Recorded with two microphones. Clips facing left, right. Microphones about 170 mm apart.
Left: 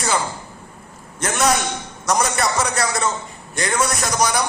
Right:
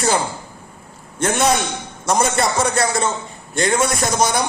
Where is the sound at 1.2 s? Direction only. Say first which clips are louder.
Right 2 dB; 30° right (ahead or behind).